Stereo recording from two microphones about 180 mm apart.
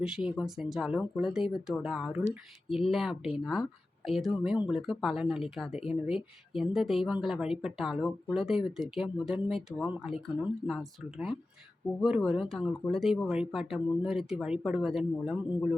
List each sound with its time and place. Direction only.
0.0 s a woman's voice: 5° right (ahead or behind)
11.9 s a woman's voice: 5° right (ahead or behind)